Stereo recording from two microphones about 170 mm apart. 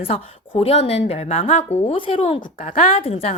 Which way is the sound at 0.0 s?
35° left (ahead or behind).